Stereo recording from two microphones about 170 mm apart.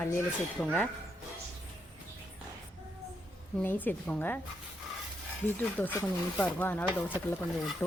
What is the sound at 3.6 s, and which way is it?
Speech, 10° left (ahead or behind).